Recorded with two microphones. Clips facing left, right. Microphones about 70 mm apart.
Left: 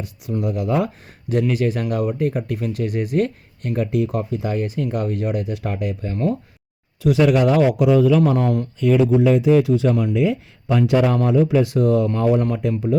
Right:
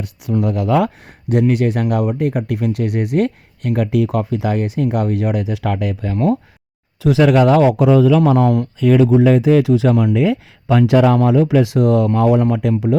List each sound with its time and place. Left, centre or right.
0.0 s speech: right
1.3 s speech: right
6.1 s speech: right
7.1 s speech: right